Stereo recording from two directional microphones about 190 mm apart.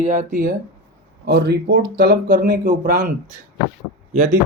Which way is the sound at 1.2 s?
60° right (ahead or behind).